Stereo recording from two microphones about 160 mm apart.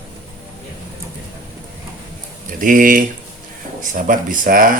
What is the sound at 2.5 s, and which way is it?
Speech, 55° right (ahead or behind).